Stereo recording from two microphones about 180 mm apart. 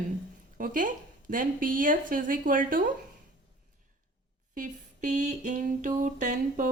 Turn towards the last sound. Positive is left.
turn(degrees=-45)  # may be behind; listen again after turning